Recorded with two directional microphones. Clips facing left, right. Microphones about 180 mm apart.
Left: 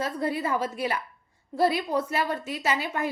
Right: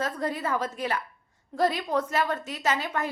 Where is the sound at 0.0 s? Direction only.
10° left (ahead or behind).